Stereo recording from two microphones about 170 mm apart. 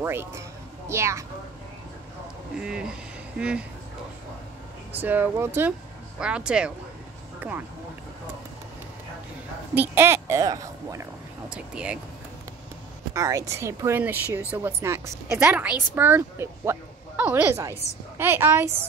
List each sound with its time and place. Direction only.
0.0 s speech: 15° right (ahead or behind)
2.6 s speech: 5° right (ahead or behind)
4.9 s speech: 10° right (ahead or behind)
7.3 s music: 10° right (ahead or behind)
9.8 s speech: 15° right (ahead or behind)
11.4 s speech: 5° right (ahead or behind)
13.1 s speech: 20° right (ahead or behind)